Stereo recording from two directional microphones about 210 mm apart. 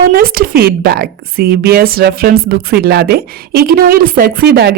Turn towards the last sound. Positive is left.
turn(degrees=-45)  # may be behind; listen again after turning